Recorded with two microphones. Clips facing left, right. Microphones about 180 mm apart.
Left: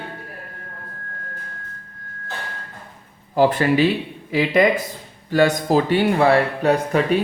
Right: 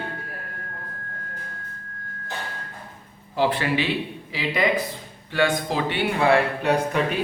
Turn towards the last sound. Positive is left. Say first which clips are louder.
# left 4 dB
turn(degrees=40)  # may be behind; listen again after turning